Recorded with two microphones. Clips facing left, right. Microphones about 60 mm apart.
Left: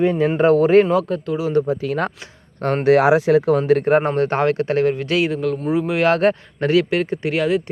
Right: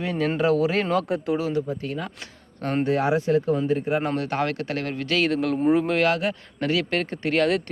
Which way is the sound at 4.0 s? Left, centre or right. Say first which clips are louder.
Left 7 dB; left.